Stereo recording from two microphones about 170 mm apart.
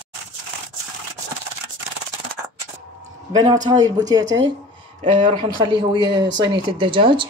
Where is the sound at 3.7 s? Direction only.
25° right (ahead or behind).